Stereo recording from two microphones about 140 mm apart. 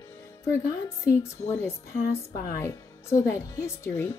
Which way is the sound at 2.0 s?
90° left.